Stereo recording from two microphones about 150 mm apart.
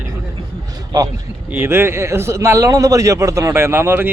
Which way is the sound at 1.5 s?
15° right (ahead or behind).